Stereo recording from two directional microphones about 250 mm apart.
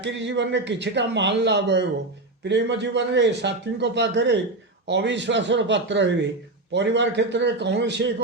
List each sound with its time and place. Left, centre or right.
0.0 s a man's voice: right